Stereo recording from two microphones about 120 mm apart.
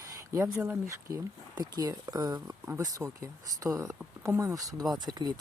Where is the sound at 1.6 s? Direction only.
35° right (ahead or behind).